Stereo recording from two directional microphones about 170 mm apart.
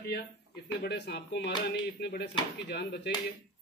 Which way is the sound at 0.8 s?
75° left (ahead or behind).